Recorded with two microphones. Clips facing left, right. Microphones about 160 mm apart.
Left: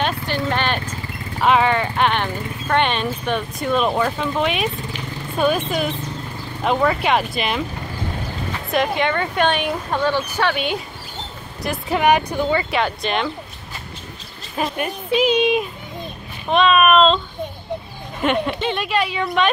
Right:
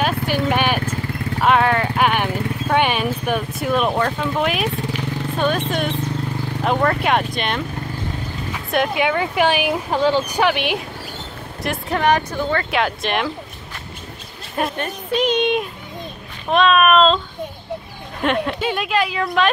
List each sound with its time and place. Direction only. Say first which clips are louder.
0.5 s speech: right 2 dB; 10° right (ahead or behind)
1.4 s vehicle: even; centre (ahead or behind)
2.7 s speech: even; 10° right (ahead or behind)
8.6 s speech: right 1 dB; centre (ahead or behind)
11.6 s vehicle: left 1 dB; centre (ahead or behind)
12.0 s speech: left 1 dB; 10° left (ahead or behind)
12.7 s speech: even; centre (ahead or behind)
14.9 s speech: left 4 dB; 5° left (ahead or behind)
18.2 s speech: even; centre (ahead or behind)